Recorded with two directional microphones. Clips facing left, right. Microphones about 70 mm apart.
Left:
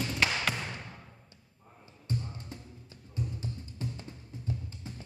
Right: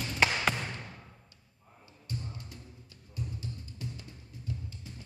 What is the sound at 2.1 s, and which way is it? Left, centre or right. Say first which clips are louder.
Music: left 5 dB; left.